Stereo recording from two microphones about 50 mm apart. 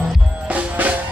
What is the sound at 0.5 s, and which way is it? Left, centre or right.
Drum, right.